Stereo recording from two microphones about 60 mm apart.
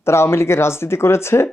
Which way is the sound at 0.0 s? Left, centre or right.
Left.